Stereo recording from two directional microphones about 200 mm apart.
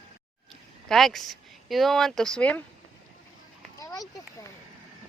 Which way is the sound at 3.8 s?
15° left (ahead or behind).